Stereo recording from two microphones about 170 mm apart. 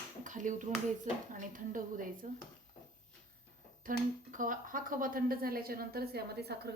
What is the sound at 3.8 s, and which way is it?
A woman's voice, 50° right (ahead or behind).